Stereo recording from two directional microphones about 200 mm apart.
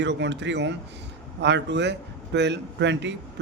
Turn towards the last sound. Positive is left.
turn(degrees=-60)  # may be behind; listen again after turning